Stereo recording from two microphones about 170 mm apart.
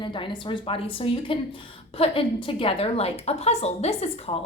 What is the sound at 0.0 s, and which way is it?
A woman's voice, 30° left (ahead or behind).